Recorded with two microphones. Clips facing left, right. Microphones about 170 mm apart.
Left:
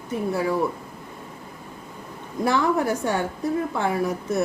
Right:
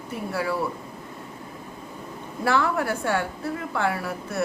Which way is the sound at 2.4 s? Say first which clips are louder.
Left 2 dB; 20° left (ahead or behind).